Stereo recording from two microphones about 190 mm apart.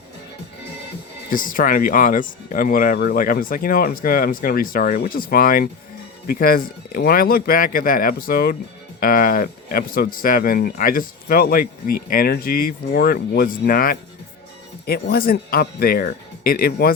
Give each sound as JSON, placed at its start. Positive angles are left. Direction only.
{"t": 1.3, "sound": "speech", "side_deg": 45}